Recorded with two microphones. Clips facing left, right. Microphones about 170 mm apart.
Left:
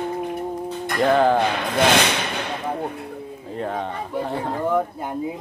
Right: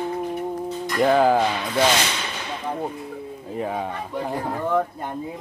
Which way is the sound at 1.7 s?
60° left (ahead or behind).